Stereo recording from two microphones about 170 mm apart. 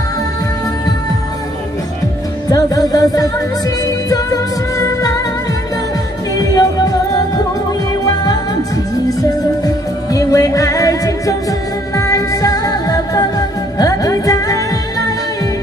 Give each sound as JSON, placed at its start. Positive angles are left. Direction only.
{"t": 2.5, "sound": "music", "side_deg": 20}
{"t": 6.3, "sound": "music", "side_deg": 20}
{"t": 9.2, "sound": "music", "side_deg": 20}